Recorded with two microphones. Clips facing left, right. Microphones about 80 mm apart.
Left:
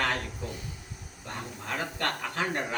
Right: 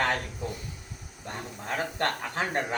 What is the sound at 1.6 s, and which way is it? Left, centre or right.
Speech, right.